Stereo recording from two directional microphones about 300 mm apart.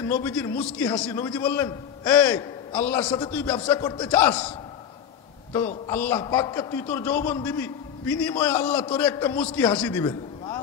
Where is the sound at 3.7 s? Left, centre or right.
Centre.